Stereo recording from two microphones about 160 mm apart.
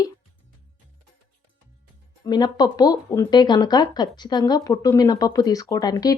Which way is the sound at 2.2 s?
25° left (ahead or behind).